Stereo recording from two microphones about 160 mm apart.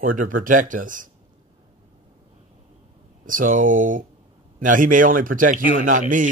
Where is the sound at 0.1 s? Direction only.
60° right (ahead or behind).